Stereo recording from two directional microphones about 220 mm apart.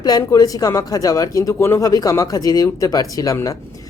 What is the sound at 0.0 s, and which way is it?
Speech, 20° left (ahead or behind).